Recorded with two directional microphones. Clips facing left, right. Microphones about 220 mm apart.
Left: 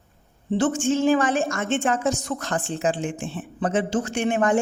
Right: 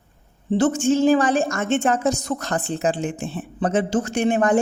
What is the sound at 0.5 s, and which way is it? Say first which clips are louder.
A man's voice: right 3 dB; 40° right (ahead or behind).